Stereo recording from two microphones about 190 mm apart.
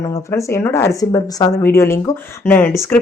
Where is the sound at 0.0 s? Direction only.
15° left (ahead or behind).